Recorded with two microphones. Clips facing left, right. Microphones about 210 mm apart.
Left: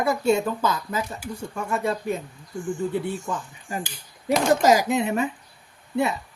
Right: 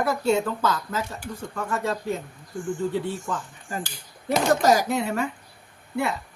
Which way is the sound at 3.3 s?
15° left (ahead or behind).